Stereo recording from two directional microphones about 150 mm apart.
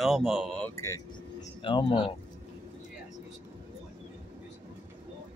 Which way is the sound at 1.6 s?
35° left (ahead or behind).